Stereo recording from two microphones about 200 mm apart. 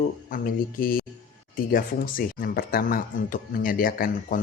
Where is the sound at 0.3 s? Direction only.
45° left (ahead or behind).